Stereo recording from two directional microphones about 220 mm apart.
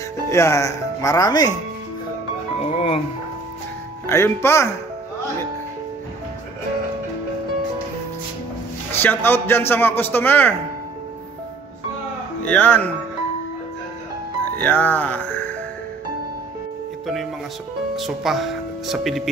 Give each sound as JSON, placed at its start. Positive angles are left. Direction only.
{"t": 0.3, "sound": "a man's voice", "side_deg": 15}
{"t": 2.6, "sound": "speech", "side_deg": 25}
{"t": 4.1, "sound": "a man's voice", "side_deg": 10}
{"t": 8.9, "sound": "a man's voice", "side_deg": 10}
{"t": 12.4, "sound": "a man's voice", "side_deg": 5}
{"t": 14.4, "sound": "speech", "side_deg": 5}
{"t": 17.0, "sound": "speech", "side_deg": 0}